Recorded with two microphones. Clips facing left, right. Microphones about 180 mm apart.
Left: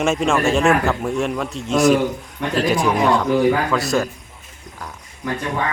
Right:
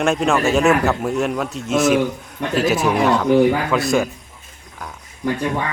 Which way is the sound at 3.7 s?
15° right (ahead or behind).